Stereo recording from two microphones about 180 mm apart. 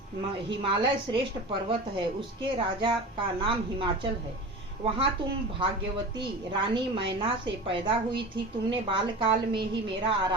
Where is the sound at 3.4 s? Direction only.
30° right (ahead or behind).